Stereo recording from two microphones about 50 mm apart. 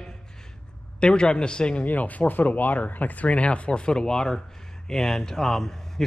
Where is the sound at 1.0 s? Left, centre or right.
Centre.